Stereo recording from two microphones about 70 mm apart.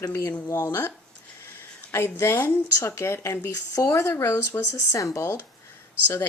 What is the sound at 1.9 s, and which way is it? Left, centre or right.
Speech, left.